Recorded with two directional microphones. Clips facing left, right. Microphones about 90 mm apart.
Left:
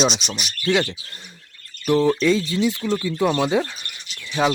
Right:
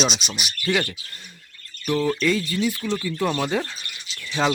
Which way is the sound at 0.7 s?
20° left (ahead or behind).